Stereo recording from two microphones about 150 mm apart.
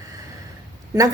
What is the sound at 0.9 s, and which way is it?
Speech, 25° right (ahead or behind).